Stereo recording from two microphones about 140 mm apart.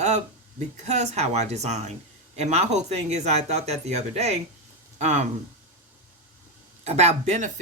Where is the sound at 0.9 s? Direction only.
50° right (ahead or behind).